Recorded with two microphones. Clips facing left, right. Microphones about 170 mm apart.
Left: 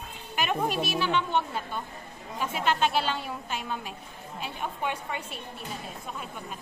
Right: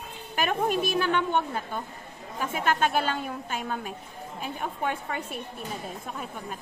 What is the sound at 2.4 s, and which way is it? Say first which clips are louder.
A woman's voice: right 1 dB; 50° right (ahead or behind).